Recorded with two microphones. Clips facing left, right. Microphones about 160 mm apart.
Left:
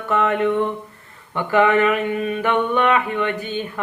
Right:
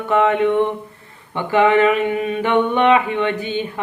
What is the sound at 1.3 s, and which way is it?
Mantra, 20° right (ahead or behind).